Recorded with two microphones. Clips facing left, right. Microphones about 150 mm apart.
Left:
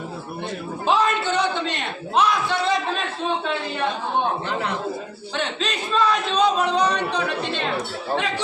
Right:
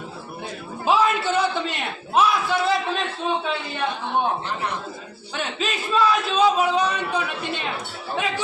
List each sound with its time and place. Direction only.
0.9 s a man's voice: 5° right (ahead or behind)
5.4 s speech: 5° right (ahead or behind)